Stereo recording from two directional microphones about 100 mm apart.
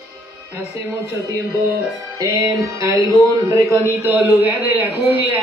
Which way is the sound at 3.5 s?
30° right (ahead or behind).